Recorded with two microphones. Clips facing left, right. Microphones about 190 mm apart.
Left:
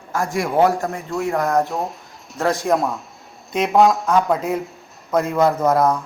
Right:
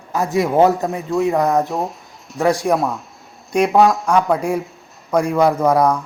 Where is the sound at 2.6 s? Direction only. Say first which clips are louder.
Right 1 dB; centre (ahead or behind).